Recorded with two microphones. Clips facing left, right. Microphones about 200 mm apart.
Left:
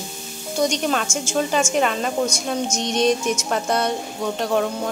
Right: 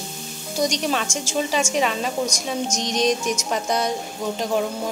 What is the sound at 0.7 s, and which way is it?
A woman's voice, centre (ahead or behind).